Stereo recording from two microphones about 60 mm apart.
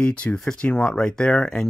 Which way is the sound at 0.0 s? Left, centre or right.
Centre.